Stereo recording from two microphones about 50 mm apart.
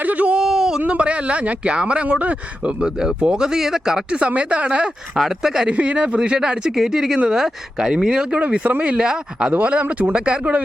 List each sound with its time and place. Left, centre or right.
0.0 s a sound: right
0.3 s a sound: centre
0.9 s a man's voice: right
3.0 s a man's voice: centre
5.1 s speech: centre
5.6 s a man's voice: right
6.1 s a man's voice: centre
9.5 s a man's voice: right